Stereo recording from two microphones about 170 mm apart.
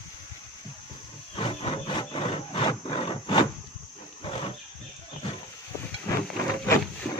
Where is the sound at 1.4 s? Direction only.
35° left (ahead or behind).